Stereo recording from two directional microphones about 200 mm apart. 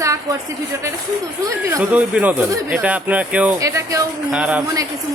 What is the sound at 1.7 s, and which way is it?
Speech, 5° right (ahead or behind).